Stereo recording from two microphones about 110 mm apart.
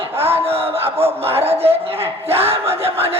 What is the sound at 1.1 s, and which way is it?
A man's voice, 65° right (ahead or behind).